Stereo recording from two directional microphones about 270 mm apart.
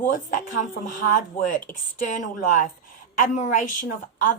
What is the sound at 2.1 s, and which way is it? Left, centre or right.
A woman's voice, left.